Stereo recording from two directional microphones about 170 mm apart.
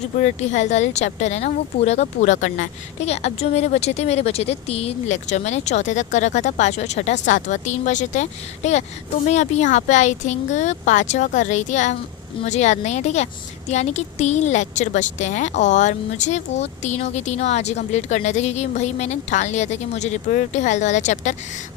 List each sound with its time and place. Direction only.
0.2 s speech: 45° left (ahead or behind)